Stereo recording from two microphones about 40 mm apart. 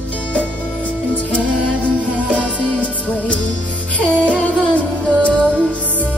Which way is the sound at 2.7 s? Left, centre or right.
Left.